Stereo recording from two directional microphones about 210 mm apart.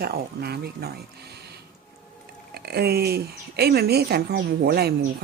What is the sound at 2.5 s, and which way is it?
Speech, 50° right (ahead or behind).